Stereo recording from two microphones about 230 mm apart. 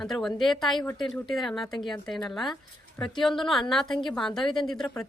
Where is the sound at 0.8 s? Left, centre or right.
Centre.